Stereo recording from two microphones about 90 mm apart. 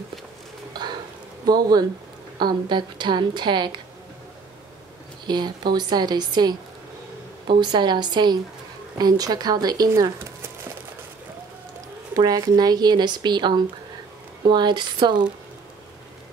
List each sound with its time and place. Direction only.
1.4 s speech: 45° right (ahead or behind)
2.3 s a woman's voice: 60° right (ahead or behind)
5.2 s a woman's voice: 55° right (ahead or behind)
12.2 s a woman's voice: 50° right (ahead or behind)